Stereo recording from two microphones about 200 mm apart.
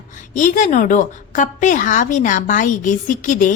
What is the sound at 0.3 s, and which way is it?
A woman's voice, 40° left (ahead or behind).